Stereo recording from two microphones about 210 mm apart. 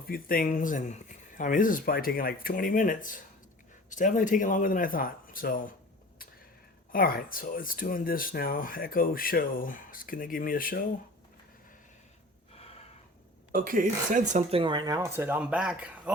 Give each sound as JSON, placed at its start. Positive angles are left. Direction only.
{"t": 0.1, "sound": "speech", "side_deg": 40}
{"t": 6.9, "sound": "speech", "side_deg": 40}
{"t": 13.5, "sound": "speech", "side_deg": -40}